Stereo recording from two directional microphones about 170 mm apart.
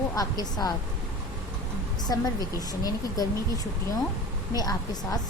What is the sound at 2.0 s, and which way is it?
A woman's voice, 20° left (ahead or behind).